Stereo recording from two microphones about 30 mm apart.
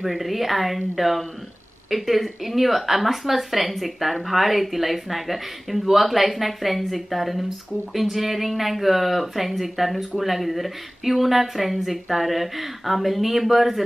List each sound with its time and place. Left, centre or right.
0.0 s speech: centre